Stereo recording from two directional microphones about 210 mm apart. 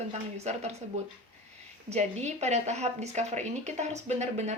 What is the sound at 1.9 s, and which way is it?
A woman's voice, 30° right (ahead or behind).